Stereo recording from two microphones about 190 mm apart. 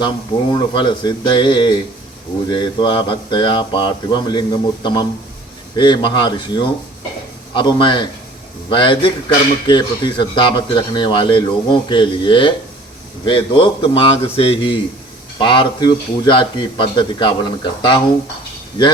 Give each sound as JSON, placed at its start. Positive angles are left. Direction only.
{"t": 0.5, "sound": "speech", "side_deg": 25}